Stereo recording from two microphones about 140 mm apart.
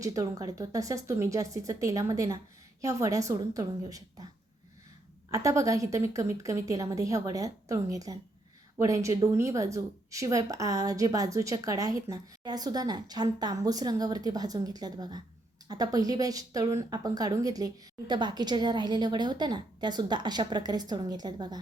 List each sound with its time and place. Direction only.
0.0 s a woman's voice: 25° right (ahead or behind)
5.3 s a woman's voice: 25° right (ahead or behind)